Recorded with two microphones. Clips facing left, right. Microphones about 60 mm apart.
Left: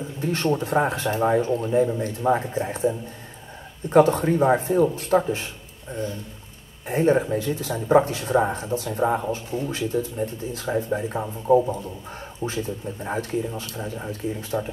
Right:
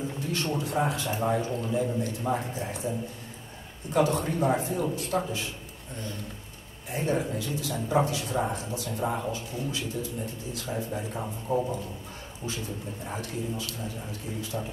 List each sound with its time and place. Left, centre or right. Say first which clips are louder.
0.2 s a man's voice: left 9 dB; left
3.9 s a man's voice: left 8 dB; left
6.9 s speech: left 9 dB; left
13.0 s speech: left 9 dB; left